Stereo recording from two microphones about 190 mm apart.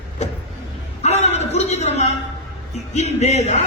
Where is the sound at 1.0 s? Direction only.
35° left (ahead or behind).